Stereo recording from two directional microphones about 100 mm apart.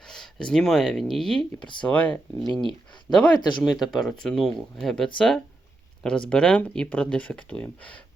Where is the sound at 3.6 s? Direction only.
5° right (ahead or behind).